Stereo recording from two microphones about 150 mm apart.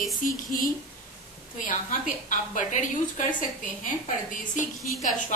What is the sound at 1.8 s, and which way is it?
A woman's voice, 60° left (ahead or behind).